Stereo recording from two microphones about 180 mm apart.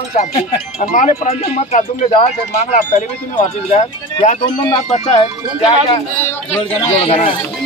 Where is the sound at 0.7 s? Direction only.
45° left (ahead or behind).